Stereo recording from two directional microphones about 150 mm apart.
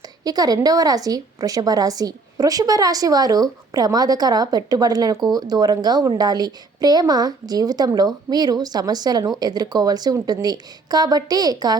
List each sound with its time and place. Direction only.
0.3 s a woman's voice: 25° right (ahead or behind)